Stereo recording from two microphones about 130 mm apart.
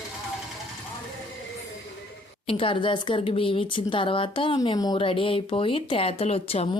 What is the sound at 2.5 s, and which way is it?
Speech, 40° left (ahead or behind).